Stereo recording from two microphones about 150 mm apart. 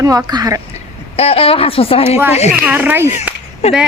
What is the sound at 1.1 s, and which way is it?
Speech, 40° left (ahead or behind).